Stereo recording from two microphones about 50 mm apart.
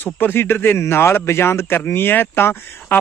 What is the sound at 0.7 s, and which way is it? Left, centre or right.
Speech, left.